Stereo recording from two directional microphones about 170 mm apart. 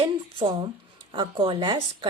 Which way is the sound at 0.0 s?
30° right (ahead or behind).